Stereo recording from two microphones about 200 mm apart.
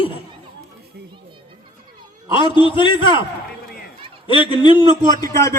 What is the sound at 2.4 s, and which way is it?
Speech, 25° left (ahead or behind).